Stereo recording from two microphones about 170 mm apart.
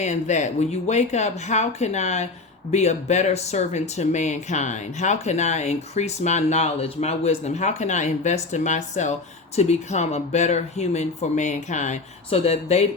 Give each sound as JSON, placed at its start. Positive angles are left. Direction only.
{"t": 0.0, "sound": "speech", "side_deg": 45}